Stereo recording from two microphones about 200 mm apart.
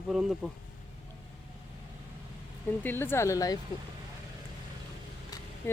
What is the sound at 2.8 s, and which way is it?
Speech, 10° left (ahead or behind).